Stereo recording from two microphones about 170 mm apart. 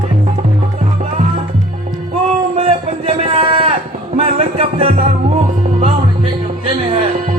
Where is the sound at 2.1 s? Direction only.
35° right (ahead or behind).